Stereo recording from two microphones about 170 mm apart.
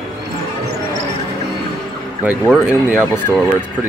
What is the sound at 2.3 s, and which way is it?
Speech, 5° right (ahead or behind).